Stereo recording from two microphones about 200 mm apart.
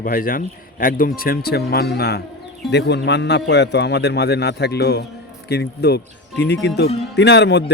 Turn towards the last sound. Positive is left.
turn(degrees=60)  # may be behind; listen again after turning